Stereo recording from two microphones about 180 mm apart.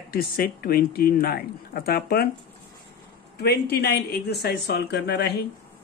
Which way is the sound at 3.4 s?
60° left (ahead or behind).